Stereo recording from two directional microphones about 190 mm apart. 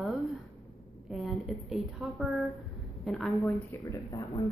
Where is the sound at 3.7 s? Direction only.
15° left (ahead or behind).